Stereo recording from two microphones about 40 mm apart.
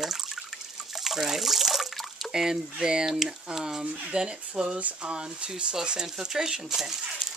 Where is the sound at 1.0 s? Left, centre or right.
Centre.